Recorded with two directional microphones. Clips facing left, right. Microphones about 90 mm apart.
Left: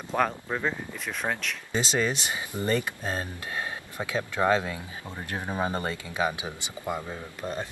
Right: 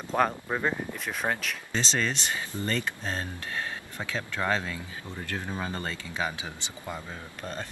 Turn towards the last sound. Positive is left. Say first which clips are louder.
# left 4 dB
turn(degrees=15)  # may be behind; listen again after turning